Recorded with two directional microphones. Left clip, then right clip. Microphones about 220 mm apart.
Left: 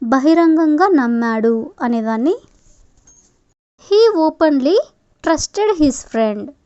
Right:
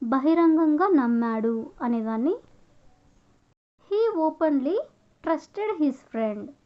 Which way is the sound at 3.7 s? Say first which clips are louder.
Left 12 dB; 45° left (ahead or behind).